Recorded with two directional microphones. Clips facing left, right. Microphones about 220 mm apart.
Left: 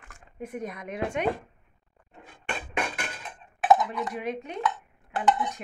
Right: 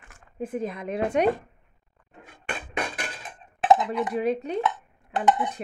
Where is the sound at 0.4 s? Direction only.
30° right (ahead or behind).